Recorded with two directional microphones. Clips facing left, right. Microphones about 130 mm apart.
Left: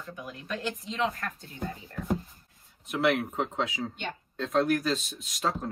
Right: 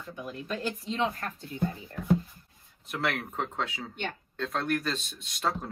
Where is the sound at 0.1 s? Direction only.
30° right (ahead or behind).